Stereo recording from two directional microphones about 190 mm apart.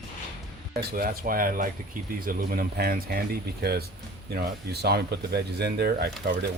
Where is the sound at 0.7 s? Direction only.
50° right (ahead or behind).